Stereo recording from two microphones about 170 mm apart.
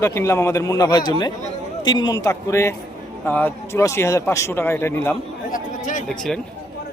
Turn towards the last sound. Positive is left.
turn(degrees=5)  # may be behind; listen again after turning